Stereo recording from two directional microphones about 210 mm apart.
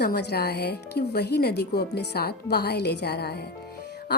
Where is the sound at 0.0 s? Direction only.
50° left (ahead or behind).